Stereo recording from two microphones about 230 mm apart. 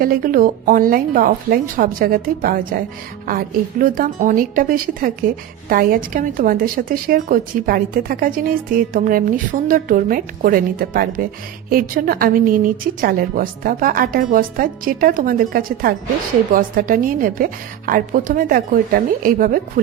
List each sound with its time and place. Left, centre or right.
0.0 s a woman's voice: right